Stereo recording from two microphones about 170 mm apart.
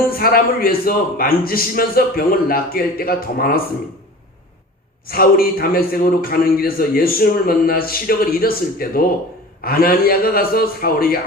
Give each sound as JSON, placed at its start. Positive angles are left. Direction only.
{"t": 0.1, "sound": "a man's voice", "side_deg": 60}
{"t": 5.0, "sound": "a man's voice", "side_deg": 60}